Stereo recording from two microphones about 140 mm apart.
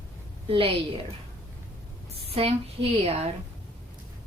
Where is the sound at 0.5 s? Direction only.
40° right (ahead or behind).